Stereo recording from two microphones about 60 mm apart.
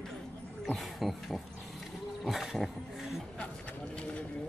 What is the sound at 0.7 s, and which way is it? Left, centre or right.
Roaring cats, centre.